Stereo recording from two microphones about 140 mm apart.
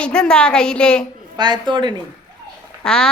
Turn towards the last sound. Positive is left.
turn(degrees=5)  # may be behind; listen again after turning